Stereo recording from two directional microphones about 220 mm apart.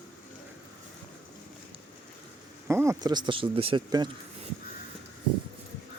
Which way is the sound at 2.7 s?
10° right (ahead or behind).